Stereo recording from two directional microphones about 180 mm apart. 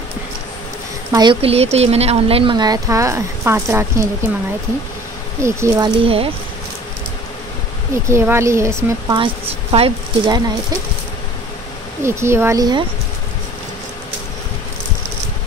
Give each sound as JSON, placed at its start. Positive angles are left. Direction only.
{"t": 1.1, "sound": "speech", "side_deg": -25}
{"t": 5.4, "sound": "speech", "side_deg": -15}
{"t": 5.9, "sound": "speech", "side_deg": -30}
{"t": 7.9, "sound": "speech", "side_deg": -15}
{"t": 9.1, "sound": "speech", "side_deg": -30}
{"t": 12.0, "sound": "speech", "side_deg": -15}